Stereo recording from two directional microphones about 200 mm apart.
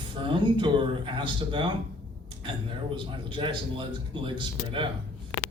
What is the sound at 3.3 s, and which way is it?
Speech, 25° right (ahead or behind).